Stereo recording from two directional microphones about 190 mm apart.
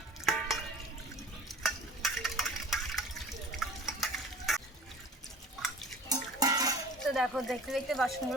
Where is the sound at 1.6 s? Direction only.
Centre (ahead or behind).